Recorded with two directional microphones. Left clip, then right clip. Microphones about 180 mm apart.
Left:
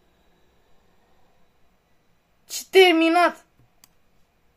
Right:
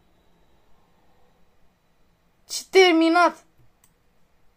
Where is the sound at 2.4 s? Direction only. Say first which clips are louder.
Left 1 dB; 15° right (ahead or behind).